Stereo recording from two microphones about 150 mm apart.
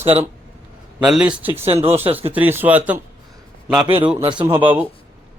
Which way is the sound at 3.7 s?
35° right (ahead or behind).